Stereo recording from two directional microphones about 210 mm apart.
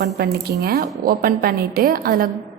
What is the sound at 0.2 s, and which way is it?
A woman's voice, 45° right (ahead or behind).